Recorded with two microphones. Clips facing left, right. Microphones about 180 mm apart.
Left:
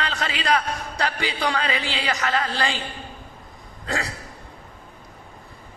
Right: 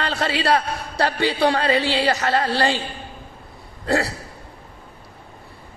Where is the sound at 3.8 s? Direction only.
35° right (ahead or behind).